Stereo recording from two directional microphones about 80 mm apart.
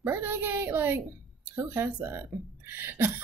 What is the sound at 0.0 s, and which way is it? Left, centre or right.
Speech, right.